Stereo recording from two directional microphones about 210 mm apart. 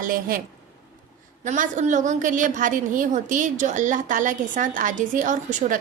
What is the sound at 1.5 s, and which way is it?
A woman's voice, 35° right (ahead or behind).